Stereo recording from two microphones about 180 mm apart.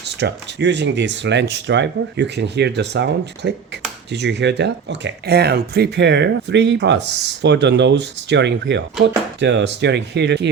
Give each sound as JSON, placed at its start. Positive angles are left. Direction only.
{"t": 0.0, "sound": "speech", "side_deg": -70}